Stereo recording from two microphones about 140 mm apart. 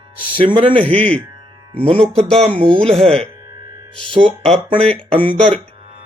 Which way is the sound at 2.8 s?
5° left (ahead or behind).